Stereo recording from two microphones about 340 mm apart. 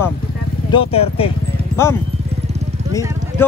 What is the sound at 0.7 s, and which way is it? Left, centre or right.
Speech, centre.